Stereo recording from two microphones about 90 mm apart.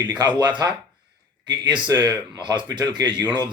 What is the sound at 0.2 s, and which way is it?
Speech, 55° right (ahead or behind).